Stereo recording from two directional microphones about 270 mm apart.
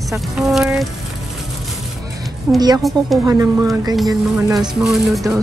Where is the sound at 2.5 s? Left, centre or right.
Centre.